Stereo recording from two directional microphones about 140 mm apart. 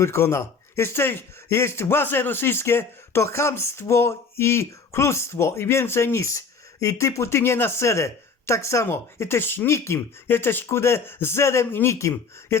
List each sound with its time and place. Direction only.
0.0 s speech: 20° left (ahead or behind)